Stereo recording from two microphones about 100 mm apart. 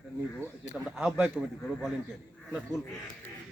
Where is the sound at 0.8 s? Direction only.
5° right (ahead or behind).